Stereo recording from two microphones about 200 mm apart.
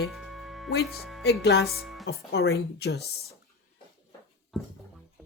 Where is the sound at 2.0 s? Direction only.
55° left (ahead or behind).